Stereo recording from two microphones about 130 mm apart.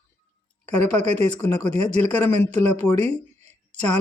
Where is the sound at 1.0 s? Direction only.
55° right (ahead or behind).